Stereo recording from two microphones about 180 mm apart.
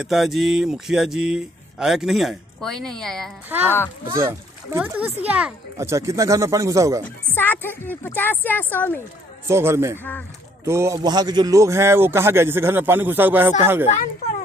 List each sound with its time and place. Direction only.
0.0 s speech: centre (ahead or behind)
3.4 s speech: 10° right (ahead or behind)
7.3 s speech: 10° left (ahead or behind)
9.5 s speech: 15° right (ahead or behind)
13.9 s speech: 40° left (ahead or behind)